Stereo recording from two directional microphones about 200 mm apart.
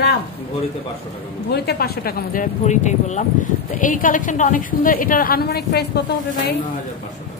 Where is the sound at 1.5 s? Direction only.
55° left (ahead or behind).